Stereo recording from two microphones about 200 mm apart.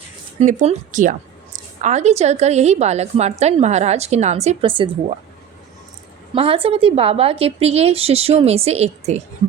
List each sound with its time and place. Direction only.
0.3 s a woman's voice: 35° right (ahead or behind)
6.3 s a woman's voice: 30° right (ahead or behind)